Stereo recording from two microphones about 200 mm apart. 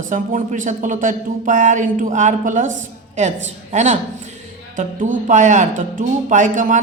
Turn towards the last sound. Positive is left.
turn(degrees=-40)  # may be behind; listen again after turning